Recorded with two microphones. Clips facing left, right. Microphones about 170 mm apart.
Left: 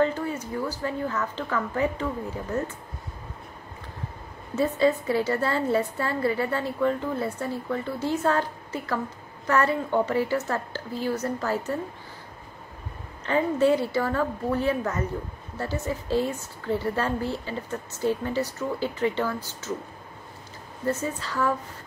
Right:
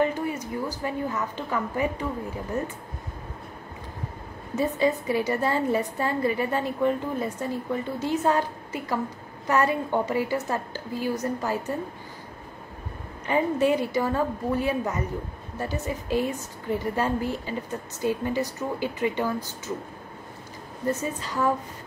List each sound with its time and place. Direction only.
0.0 s a woman's voice: 15° right (ahead or behind)
4.6 s a woman's voice: 15° right (ahead or behind)
13.2 s a woman's voice: 15° right (ahead or behind)
20.8 s a woman's voice: 15° right (ahead or behind)